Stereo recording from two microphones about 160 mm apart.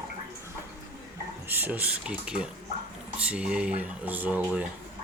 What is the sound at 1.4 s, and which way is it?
Speech, 10° right (ahead or behind).